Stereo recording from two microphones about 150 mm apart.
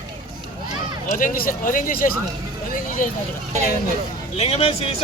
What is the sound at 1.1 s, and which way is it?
Speech, 65° left (ahead or behind).